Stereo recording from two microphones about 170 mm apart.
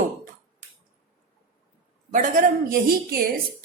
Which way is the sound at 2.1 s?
50° right (ahead or behind).